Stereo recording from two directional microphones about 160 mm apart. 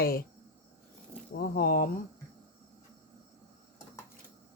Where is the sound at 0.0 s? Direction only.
70° left (ahead or behind).